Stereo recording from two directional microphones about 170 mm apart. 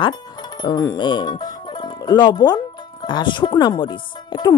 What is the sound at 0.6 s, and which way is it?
Music, 25° left (ahead or behind).